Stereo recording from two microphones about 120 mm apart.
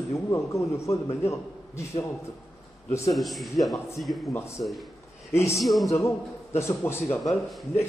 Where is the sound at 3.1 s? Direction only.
Centre (ahead or behind).